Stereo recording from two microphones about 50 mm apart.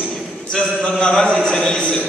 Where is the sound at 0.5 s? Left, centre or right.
Centre.